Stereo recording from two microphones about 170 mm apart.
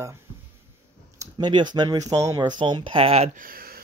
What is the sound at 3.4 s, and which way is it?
Speech, 60° right (ahead or behind).